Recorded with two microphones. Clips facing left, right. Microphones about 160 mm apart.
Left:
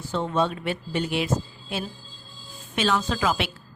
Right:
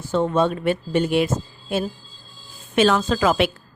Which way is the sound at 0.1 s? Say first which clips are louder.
Right 5 dB; 50° right (ahead or behind).